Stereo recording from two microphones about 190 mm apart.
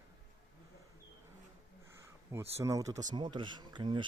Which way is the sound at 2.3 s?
15° right (ahead or behind).